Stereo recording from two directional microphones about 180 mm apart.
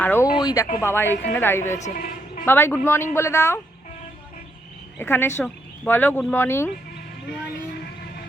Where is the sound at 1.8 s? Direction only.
50° left (ahead or behind).